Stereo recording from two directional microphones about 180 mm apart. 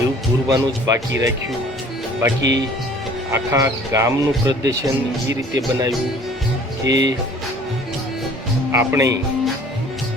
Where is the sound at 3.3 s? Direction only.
15° right (ahead or behind).